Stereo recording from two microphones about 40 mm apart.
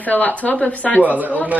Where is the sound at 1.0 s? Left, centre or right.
Right.